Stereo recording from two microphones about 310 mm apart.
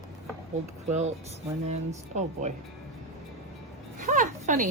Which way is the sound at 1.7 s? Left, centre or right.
Right.